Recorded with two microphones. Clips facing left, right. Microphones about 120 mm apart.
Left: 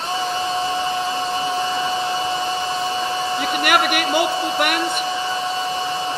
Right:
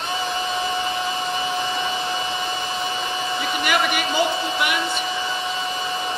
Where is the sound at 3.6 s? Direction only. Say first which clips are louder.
Left 3 dB; 55° left (ahead or behind).